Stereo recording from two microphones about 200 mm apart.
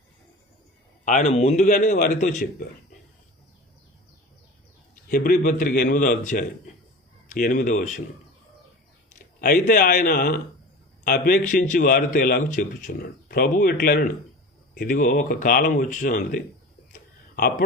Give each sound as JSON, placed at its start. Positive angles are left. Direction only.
{"t": 1.0, "sound": "a man's voice", "side_deg": 35}
{"t": 5.0, "sound": "a man's voice", "side_deg": 45}
{"t": 9.4, "sound": "speech", "side_deg": 45}